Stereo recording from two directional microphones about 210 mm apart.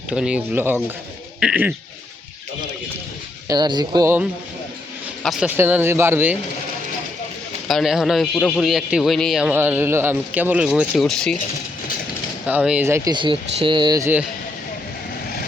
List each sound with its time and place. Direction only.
0.1 s speech: 5° right (ahead or behind)
1.4 s goat: 5° right (ahead or behind)
3.4 s speech: 20° right (ahead or behind)
7.7 s a man's voice: centre (ahead or behind)
12.5 s speech: 5° right (ahead or behind)